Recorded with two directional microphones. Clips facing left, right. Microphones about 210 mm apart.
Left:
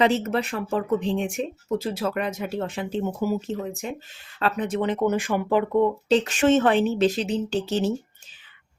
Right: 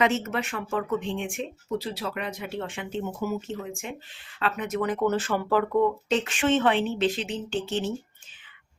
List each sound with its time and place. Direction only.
0.0 s speech: 35° left (ahead or behind)
6.1 s speech: 35° left (ahead or behind)